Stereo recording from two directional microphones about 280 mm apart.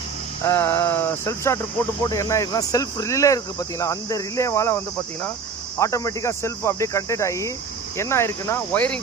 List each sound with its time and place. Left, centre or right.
0.4 s speech: centre
5.8 s speech: centre